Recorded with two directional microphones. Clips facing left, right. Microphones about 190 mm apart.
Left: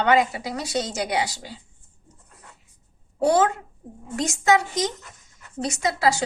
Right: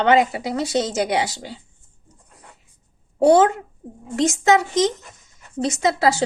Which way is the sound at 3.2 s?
25° right (ahead or behind).